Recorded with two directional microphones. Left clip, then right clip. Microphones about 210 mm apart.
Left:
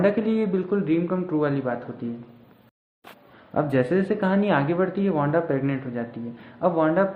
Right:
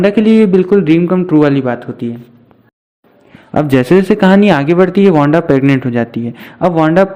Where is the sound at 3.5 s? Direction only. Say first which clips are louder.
Right 12 dB; 45° right (ahead or behind).